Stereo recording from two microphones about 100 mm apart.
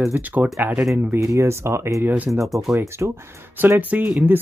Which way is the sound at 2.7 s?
25° right (ahead or behind).